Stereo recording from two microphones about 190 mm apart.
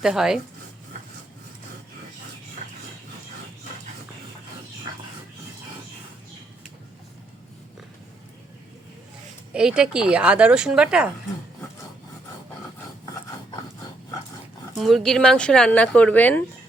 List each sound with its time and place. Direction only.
0.0 s speech: 5° right (ahead or behind)
9.5 s speech: 5° right (ahead or behind)
14.8 s speech: centre (ahead or behind)